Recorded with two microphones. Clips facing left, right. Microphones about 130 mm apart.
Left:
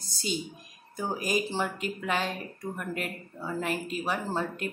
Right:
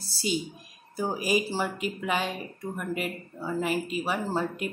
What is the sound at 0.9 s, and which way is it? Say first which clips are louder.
A woman's voice: right 3 dB; 5° right (ahead or behind).